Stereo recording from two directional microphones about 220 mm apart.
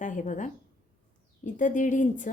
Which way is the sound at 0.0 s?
35° left (ahead or behind).